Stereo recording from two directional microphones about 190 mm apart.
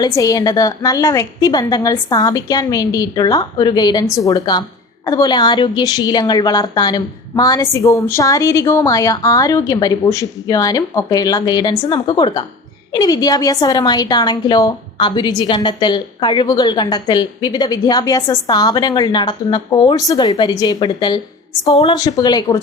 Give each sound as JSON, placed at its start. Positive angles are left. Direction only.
{"t": 0.0, "sound": "a woman's voice", "side_deg": 20}
{"t": 21.9, "sound": "a woman's voice", "side_deg": 20}